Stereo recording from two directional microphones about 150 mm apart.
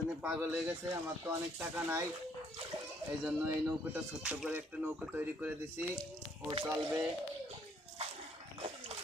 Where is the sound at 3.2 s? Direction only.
15° right (ahead or behind).